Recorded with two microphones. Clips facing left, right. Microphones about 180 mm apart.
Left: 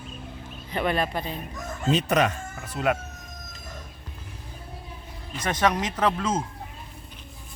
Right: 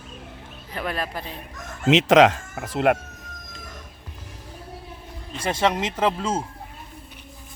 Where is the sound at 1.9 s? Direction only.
90° right; by 3.0 s 70° right (ahead or behind).